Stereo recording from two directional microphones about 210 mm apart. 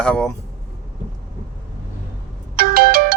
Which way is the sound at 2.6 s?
45° right (ahead or behind).